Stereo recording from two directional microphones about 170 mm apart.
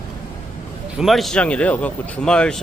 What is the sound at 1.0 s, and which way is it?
Speech, centre (ahead or behind).